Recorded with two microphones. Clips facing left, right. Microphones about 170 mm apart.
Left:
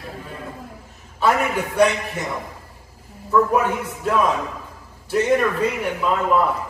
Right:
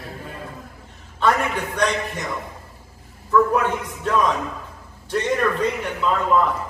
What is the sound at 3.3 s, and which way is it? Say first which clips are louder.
A man's voice: even; 10° left (ahead or behind).